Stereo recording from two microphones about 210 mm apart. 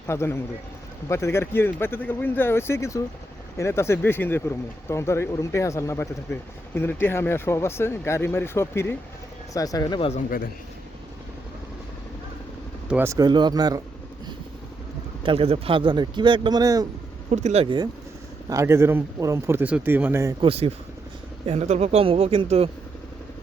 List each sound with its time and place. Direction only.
0.1 s speech: 10° left (ahead or behind)
10.2 s a man's voice: 40° left (ahead or behind)
12.9 s speech: 10° right (ahead or behind)
15.2 s speech: 25° right (ahead or behind)
17.3 s speech: 30° right (ahead or behind)
18.4 s speech: 15° right (ahead or behind)
20.4 s speech: 30° right (ahead or behind)